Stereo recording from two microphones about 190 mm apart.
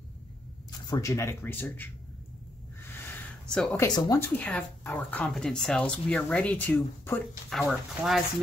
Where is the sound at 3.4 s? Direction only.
5° left (ahead or behind).